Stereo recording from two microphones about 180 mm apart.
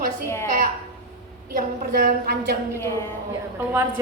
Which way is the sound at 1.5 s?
50° right (ahead or behind).